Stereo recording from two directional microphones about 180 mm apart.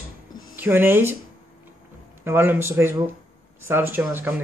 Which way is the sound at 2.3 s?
10° right (ahead or behind).